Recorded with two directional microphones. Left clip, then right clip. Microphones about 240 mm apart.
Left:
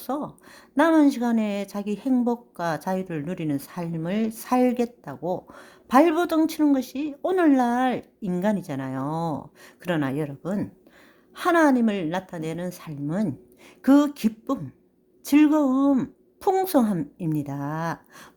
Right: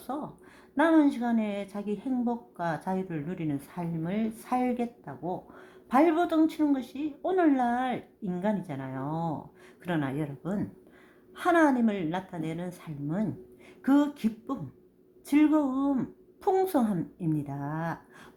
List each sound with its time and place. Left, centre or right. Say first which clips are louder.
0.0 s a woman's voice: left 6 dB; left